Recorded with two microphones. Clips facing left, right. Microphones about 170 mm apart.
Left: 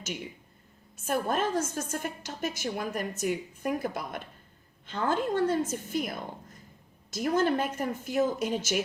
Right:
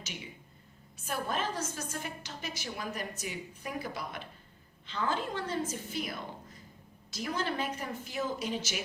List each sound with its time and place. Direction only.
0.9 s a woman's voice: 50° left (ahead or behind)